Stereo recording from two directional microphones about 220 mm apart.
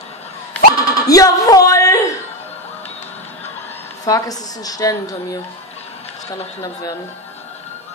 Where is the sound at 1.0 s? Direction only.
15° left (ahead or behind).